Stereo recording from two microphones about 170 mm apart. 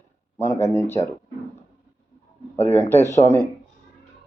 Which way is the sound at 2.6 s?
15° left (ahead or behind).